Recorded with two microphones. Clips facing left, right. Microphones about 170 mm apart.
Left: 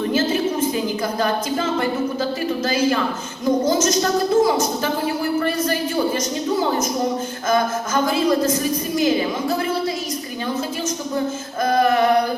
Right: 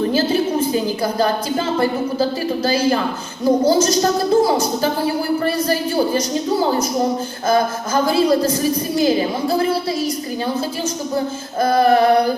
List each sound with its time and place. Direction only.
0.1 s a woman's voice: 35° right (ahead or behind)
11.6 s a woman's voice: 35° right (ahead or behind)